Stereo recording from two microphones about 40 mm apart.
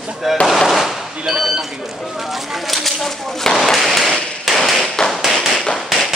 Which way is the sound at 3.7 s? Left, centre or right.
Centre.